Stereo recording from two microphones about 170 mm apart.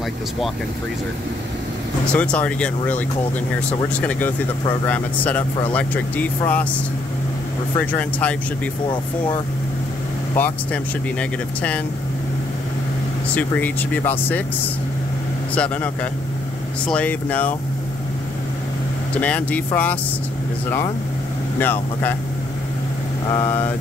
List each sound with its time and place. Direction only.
2.0 s speech: 5° left (ahead or behind)
7.8 s speech: 10° left (ahead or behind)
10.3 s speech: 10° left (ahead or behind)
13.3 s speech: 10° left (ahead or behind)
15.5 s speech: 10° left (ahead or behind)
19.1 s speech: 10° left (ahead or behind)
21.5 s speech: 10° left (ahead or behind)
23.3 s speech: 15° left (ahead or behind)